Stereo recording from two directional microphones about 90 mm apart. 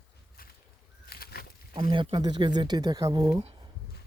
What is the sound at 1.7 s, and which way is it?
Speech, 70° right (ahead or behind).